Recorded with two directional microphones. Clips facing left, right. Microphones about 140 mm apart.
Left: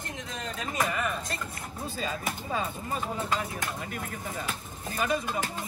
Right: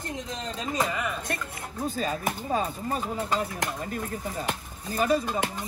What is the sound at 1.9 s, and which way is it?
Speech, 45° right (ahead or behind).